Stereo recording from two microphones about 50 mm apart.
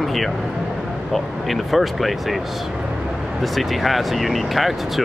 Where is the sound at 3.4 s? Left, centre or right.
Centre.